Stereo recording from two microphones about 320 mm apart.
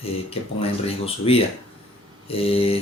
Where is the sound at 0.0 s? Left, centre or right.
Centre.